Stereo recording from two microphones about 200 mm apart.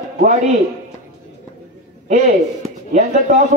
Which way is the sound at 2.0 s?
35° right (ahead or behind).